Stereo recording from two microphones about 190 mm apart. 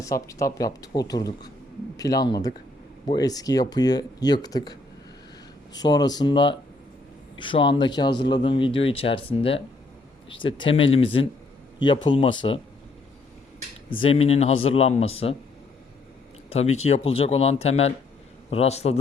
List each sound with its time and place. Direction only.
0.0 s speech: 15° left (ahead or behind)
13.9 s speech: 30° left (ahead or behind)
16.7 s speech: 35° left (ahead or behind)